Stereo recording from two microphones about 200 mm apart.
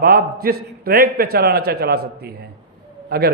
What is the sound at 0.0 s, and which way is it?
A man's voice, 50° right (ahead or behind).